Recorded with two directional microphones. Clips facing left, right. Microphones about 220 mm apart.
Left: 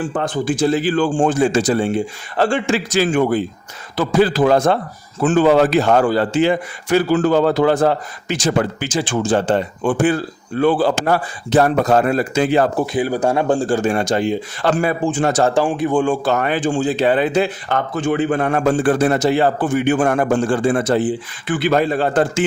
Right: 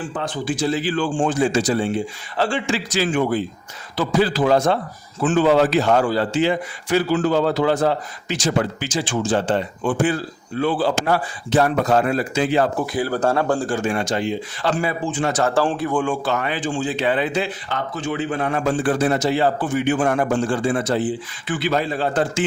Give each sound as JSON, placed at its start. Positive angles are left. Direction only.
{"t": 0.0, "sound": "speech", "side_deg": 50}
{"t": 12.8, "sound": "speech", "side_deg": 20}
{"t": 15.5, "sound": "a man's voice", "side_deg": 15}
{"t": 15.9, "sound": "speech", "side_deg": 25}
{"t": 16.2, "sound": "speech", "side_deg": 45}